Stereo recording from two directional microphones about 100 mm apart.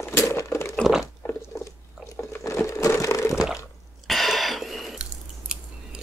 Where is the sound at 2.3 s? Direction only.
25° left (ahead or behind).